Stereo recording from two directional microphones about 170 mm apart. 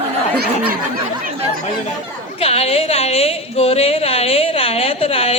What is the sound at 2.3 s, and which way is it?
A woman's voice, 35° left (ahead or behind).